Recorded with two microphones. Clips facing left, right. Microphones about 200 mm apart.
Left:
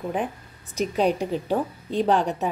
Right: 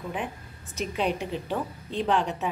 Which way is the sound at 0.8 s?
40° left (ahead or behind).